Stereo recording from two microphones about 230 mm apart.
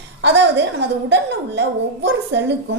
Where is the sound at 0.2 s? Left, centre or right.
Right.